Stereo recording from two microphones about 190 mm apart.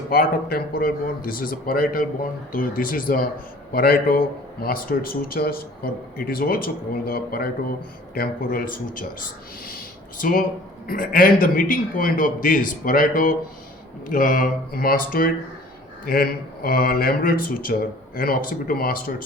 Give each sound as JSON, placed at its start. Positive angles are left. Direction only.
{"t": 0.1, "sound": "a man's voice", "side_deg": 55}
{"t": 9.6, "sound": "a sound", "side_deg": 45}
{"t": 10.8, "sound": "a man's voice", "side_deg": 50}